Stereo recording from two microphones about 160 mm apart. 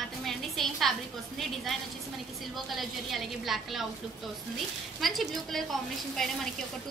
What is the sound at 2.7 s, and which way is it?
A woman's voice, centre (ahead or behind).